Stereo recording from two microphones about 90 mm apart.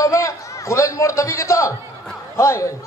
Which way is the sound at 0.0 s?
35° left (ahead or behind).